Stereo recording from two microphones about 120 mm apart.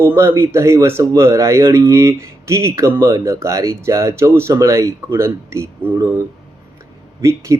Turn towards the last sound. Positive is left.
turn(degrees=-25)  # may be behind; listen again after turning